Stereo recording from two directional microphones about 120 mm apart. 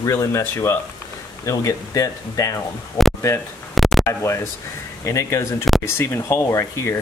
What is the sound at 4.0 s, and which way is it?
Speech, 25° left (ahead or behind).